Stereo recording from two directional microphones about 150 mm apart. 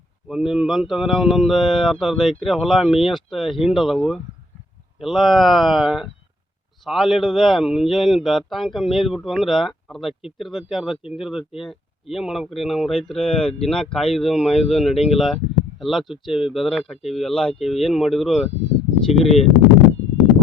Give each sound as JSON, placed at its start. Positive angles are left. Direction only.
{"t": 0.3, "sound": "a man's voice", "side_deg": -5}
{"t": 17.0, "sound": "speech", "side_deg": 45}
{"t": 17.2, "sound": "a man's voice", "side_deg": 5}